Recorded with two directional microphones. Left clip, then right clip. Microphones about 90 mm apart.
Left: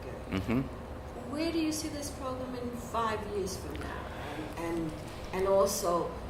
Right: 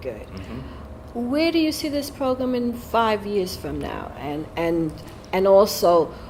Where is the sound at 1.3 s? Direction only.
45° right (ahead or behind).